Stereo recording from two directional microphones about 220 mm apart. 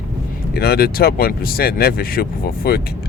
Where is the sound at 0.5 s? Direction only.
45° left (ahead or behind).